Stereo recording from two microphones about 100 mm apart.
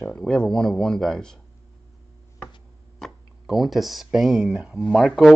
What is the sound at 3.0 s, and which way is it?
Speech, centre (ahead or behind).